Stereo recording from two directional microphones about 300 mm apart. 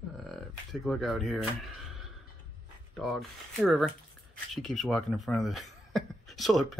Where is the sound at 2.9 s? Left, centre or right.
Centre.